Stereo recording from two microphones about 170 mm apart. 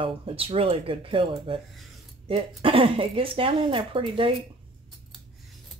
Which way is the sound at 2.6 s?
30° right (ahead or behind).